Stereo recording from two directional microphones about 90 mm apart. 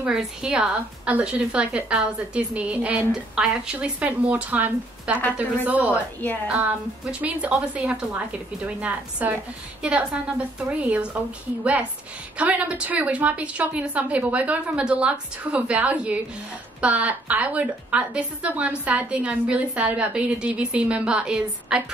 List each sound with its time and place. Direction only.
0.0 s a woman's voice: 10° right (ahead or behind)
12.4 s a woman's voice: 15° right (ahead or behind)